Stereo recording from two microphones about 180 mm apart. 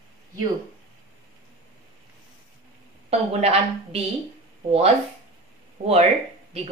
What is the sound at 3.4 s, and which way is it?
Speech, 35° right (ahead or behind).